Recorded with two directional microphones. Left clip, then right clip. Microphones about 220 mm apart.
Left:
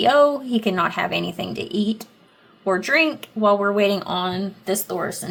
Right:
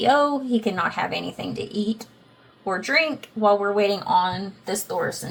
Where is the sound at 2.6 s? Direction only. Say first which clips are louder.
Left 3 dB; 45° left (ahead or behind).